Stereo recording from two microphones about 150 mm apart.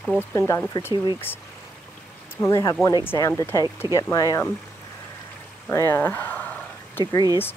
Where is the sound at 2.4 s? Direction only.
20° left (ahead or behind).